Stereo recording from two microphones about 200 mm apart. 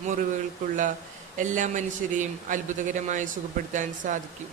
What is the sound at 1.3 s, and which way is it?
Speech, 40° right (ahead or behind).